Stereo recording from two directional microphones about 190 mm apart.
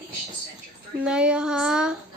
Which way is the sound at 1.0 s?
5° right (ahead or behind).